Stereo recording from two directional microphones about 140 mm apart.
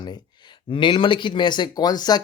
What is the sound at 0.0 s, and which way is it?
Speech, 30° left (ahead or behind).